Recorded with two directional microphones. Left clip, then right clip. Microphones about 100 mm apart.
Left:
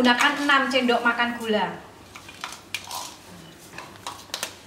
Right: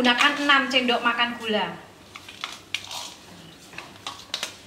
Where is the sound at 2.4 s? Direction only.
15° left (ahead or behind).